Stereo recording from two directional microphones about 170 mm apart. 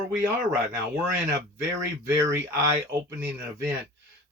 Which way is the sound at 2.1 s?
20° right (ahead or behind).